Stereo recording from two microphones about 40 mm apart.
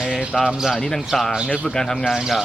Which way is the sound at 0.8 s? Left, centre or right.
Centre.